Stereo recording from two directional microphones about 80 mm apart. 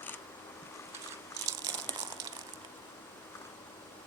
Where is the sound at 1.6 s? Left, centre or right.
Right.